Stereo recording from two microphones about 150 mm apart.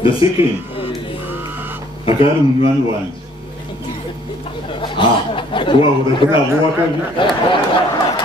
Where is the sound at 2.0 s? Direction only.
40° left (ahead or behind).